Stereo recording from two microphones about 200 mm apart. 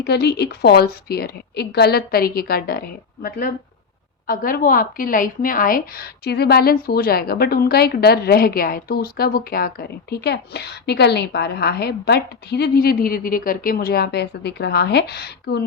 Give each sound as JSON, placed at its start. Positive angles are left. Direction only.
{"t": 0.0, "sound": "a woman's voice", "side_deg": 55}